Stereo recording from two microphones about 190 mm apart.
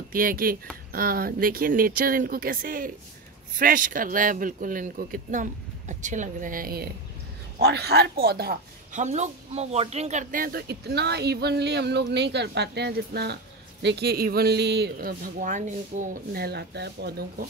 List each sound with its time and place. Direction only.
0.1 s speech: 50° right (ahead or behind)
9.0 s speech: 35° right (ahead or behind); by 17.3 s 60° right (ahead or behind)